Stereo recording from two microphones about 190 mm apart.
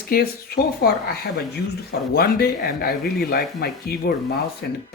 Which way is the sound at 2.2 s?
55° left (ahead or behind).